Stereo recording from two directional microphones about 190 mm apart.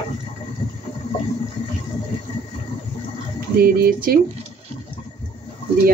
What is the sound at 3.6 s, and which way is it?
Speech, 50° right (ahead or behind).